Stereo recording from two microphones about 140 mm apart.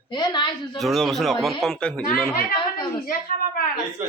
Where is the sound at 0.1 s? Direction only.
30° left (ahead or behind).